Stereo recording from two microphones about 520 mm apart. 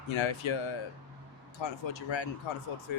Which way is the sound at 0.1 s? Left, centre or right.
Left.